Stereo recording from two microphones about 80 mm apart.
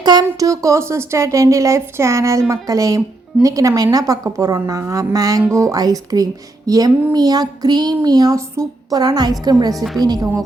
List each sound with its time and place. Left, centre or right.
0.0 s speech: right
7.1 s child singing: right
8.6 s speech: right
8.9 s child singing: right
9.7 s a woman's voice: centre
10.0 s speech: right